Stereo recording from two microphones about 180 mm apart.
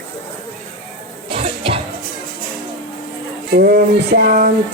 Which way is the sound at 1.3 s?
30° right (ahead or behind).